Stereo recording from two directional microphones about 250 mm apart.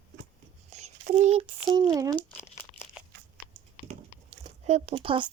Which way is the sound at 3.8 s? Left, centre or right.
Right.